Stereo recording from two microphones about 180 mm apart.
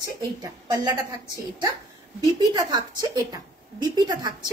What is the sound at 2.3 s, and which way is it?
A woman's voice, 20° right (ahead or behind).